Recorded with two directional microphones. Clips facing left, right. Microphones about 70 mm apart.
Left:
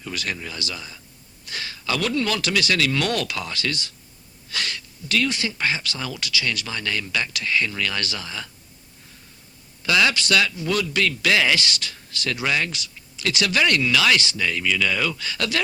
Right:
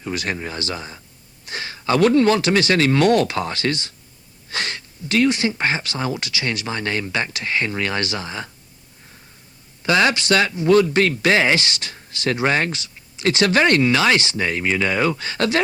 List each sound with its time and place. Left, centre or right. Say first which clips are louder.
0.0 s speech: right 5 dB; right
9.8 s speech: right 3 dB; right